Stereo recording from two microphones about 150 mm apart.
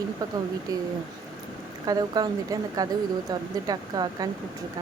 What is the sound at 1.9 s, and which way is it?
A woman's voice, 25° right (ahead or behind).